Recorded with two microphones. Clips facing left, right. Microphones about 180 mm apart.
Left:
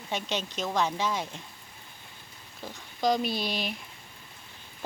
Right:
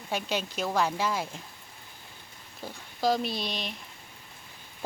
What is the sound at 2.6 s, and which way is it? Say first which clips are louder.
Speech: even; 5° right (ahead or behind).